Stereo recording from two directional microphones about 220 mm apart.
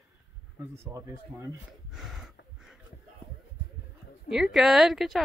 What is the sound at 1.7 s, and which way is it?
Gasp, centre (ahead or behind).